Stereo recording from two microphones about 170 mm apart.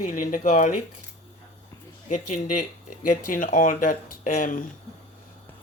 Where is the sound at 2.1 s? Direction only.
45° left (ahead or behind).